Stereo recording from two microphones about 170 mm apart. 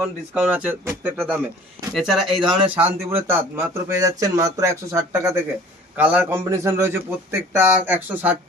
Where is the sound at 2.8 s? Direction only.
10° right (ahead or behind).